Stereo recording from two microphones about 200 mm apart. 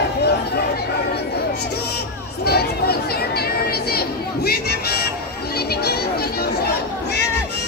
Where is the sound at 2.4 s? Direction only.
50° left (ahead or behind).